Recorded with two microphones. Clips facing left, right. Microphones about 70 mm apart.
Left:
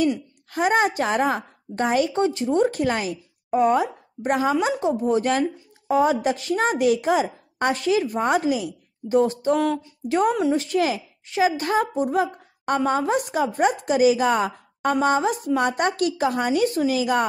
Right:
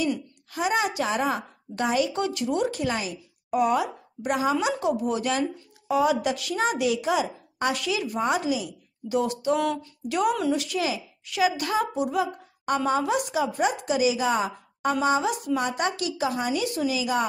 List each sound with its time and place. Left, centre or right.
0.5 s a woman's voice: left
3.4 s a woman's voice: left